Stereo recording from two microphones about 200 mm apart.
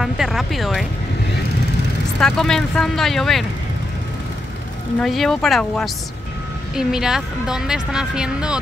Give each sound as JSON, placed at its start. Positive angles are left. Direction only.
{"t": 0.0, "sound": "a woman's voice", "side_deg": 0}
{"t": 2.1, "sound": "a woman's voice", "side_deg": 0}
{"t": 5.0, "sound": "a woman's voice", "side_deg": 0}